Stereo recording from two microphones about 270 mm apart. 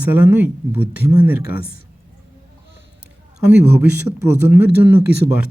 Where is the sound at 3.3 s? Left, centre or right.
Centre.